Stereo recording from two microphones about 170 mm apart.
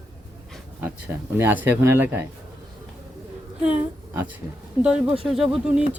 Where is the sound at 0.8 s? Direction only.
10° right (ahead or behind).